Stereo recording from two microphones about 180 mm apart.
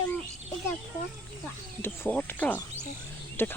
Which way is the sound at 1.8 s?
10° left (ahead or behind).